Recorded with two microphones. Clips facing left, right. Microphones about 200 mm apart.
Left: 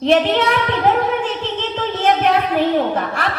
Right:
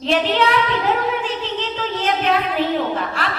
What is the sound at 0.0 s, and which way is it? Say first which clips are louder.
Speech: left 4 dB; 55° left (ahead or behind).